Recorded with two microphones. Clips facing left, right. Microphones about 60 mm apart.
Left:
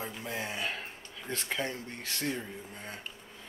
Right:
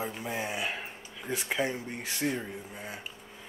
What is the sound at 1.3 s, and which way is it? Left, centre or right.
Speech, centre.